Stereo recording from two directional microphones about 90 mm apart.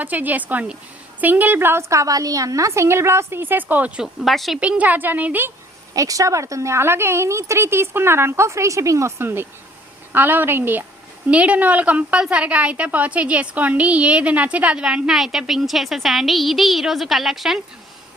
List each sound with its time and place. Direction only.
0.0 s a woman's voice: 20° right (ahead or behind); by 4.6 s centre (ahead or behind)
4.6 s a woman's voice: 15° right (ahead or behind)
5.9 s a woman's voice: 40° right (ahead or behind); by 17.6 s 5° right (ahead or behind)